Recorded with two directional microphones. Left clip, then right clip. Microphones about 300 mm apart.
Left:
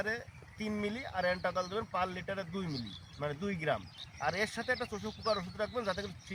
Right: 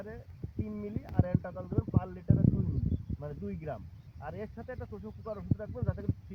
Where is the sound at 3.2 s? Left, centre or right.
Centre.